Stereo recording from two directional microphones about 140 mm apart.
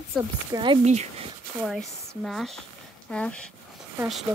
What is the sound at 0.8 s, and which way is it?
Speech, 50° right (ahead or behind).